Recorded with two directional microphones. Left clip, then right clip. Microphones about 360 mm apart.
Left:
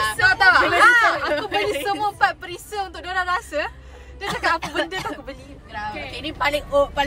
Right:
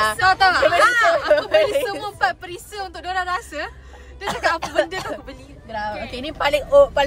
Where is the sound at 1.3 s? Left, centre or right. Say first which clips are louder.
Right 7 dB; centre.